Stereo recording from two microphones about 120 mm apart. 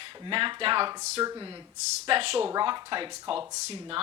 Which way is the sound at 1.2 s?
35° right (ahead or behind).